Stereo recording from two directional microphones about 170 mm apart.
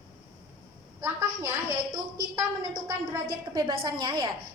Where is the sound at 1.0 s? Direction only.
20° right (ahead or behind).